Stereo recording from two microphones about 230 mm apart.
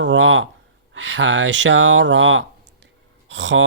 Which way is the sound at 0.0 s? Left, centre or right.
Right.